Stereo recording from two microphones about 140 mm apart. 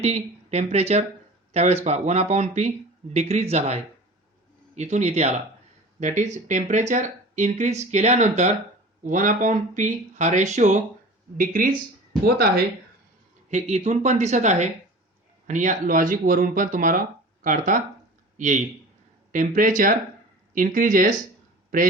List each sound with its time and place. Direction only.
0.0 s speech: 50° right (ahead or behind)
6.0 s speech: 60° right (ahead or behind)
11.3 s speech: 80° right
13.5 s a man's voice: 55° right (ahead or behind); by 21.2 s 70° right (ahead or behind)